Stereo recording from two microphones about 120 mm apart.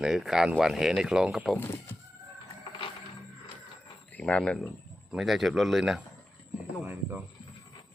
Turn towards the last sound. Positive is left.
turn(degrees=-15)  # may be behind; listen again after turning